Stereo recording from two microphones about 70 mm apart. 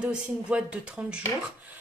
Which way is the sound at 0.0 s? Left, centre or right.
Centre.